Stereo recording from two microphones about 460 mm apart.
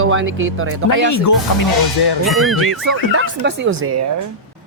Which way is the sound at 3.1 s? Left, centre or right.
Right.